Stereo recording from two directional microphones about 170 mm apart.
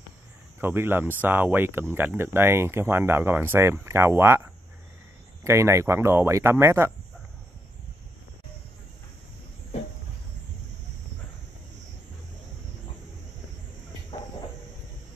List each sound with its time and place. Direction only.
0.6 s speech: 15° right (ahead or behind)
5.4 s speech: 15° right (ahead or behind)